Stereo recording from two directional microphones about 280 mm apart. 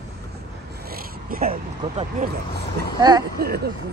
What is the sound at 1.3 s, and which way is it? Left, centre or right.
Speech, right.